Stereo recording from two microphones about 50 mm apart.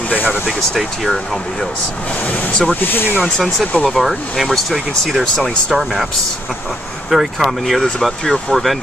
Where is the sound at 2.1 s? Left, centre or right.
Left.